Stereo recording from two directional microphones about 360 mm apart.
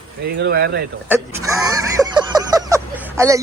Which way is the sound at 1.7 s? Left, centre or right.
Centre.